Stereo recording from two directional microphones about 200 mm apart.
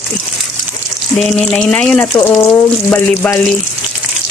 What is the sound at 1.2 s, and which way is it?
Speech, 5° left (ahead or behind).